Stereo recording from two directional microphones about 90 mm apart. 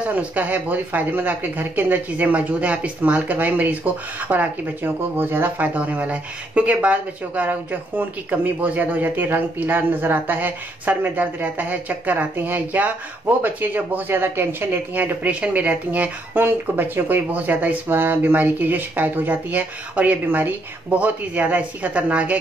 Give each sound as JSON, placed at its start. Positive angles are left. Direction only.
{"t": 0.0, "sound": "speech", "side_deg": -15}